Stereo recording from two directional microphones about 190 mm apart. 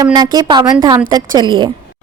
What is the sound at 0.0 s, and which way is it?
A woman's voice, 20° right (ahead or behind).